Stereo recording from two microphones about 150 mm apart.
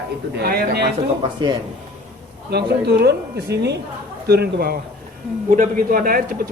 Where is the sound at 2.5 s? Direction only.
90° right.